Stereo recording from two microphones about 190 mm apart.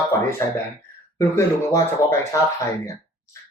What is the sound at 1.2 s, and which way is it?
Speech, 15° left (ahead or behind).